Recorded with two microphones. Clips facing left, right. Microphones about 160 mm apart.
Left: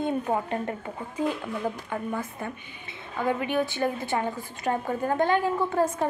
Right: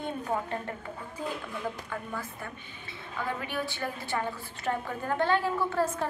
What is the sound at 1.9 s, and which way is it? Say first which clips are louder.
A woman's voice: left 6 dB; 20° left (ahead or behind).